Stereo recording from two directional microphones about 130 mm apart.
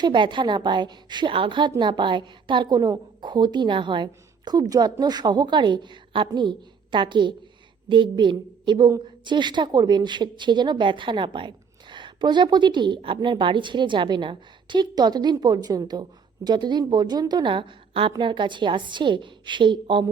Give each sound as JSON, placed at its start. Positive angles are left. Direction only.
{"t": 0.0, "sound": "a woman's voice", "side_deg": -35}